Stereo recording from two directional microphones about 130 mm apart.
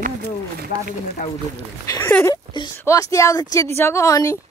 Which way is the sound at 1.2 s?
80° left.